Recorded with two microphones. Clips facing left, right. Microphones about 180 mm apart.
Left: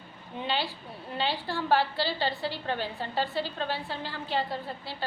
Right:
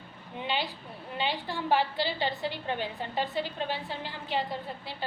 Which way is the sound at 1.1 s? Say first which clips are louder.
Left 1 dB; 15° right (ahead or behind).